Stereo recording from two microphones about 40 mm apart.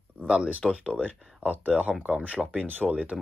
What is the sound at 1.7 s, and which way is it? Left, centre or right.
Speech, right.